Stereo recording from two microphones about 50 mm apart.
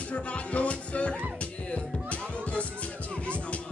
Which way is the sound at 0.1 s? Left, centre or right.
Left.